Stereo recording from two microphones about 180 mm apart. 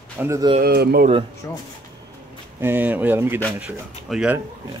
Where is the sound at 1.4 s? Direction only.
15° left (ahead or behind).